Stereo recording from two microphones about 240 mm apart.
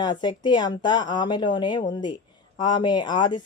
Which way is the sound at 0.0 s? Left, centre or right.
Centre.